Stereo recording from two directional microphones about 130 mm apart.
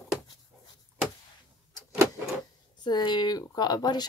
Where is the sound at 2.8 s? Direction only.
35° left (ahead or behind).